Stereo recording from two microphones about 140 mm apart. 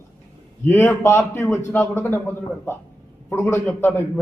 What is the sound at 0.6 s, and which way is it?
A man's voice, 15° left (ahead or behind).